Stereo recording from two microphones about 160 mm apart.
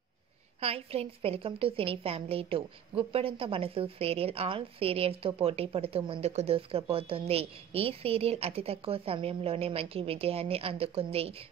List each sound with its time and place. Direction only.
0.6 s a woman's voice: 40° right (ahead or behind)